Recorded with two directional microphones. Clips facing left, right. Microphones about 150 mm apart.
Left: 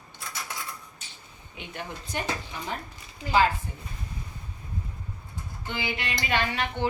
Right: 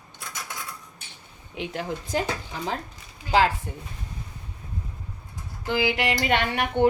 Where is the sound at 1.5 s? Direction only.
90° right.